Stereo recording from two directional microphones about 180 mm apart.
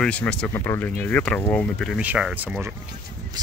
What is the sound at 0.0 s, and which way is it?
Speech, 5° left (ahead or behind).